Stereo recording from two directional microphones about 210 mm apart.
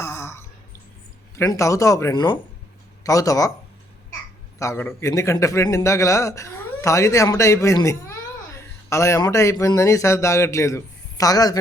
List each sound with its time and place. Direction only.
0.0 s a sound: 10° left (ahead or behind)
1.4 s a man's voice: 15° left (ahead or behind)
4.6 s a man's voice: 10° left (ahead or behind)